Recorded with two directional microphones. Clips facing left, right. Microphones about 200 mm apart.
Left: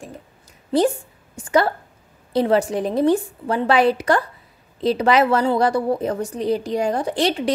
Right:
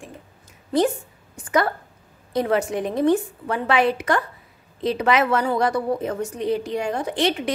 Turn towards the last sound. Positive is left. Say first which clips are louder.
# left 2 dB
turn(degrees=35)  # may be behind; listen again after turning